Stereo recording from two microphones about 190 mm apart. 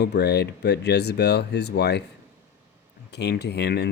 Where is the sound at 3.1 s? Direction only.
60° left (ahead or behind).